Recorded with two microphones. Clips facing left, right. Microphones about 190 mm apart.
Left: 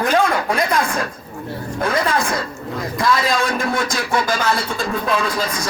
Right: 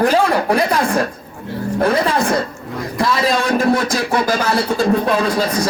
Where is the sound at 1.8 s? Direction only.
30° right (ahead or behind).